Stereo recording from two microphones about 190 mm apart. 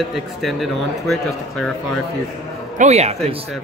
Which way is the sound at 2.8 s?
35° right (ahead or behind).